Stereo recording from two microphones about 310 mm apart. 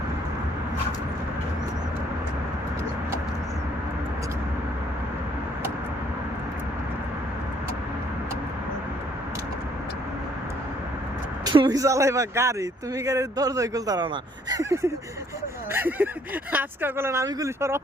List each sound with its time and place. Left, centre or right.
11.4 s speech: centre
14.5 s a sound: centre
15.7 s speech: centre